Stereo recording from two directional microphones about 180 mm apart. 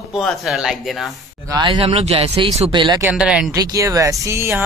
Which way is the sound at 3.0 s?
5° right (ahead or behind).